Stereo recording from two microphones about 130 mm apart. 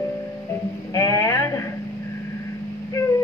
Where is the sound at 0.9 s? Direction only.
25° left (ahead or behind).